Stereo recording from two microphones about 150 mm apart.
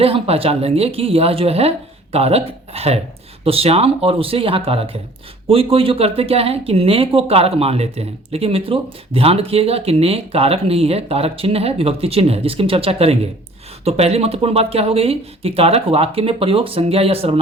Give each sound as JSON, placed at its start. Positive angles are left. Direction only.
{"t": 0.0, "sound": "speech", "side_deg": -40}